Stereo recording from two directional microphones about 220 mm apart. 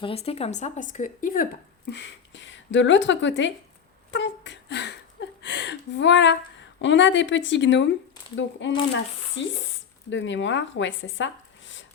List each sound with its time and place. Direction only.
0.0 s speech: 25° left (ahead or behind)
1.9 s speech: 55° left (ahead or behind)
4.1 s a sound: 55° left (ahead or behind)
6.8 s speech: 55° left (ahead or behind)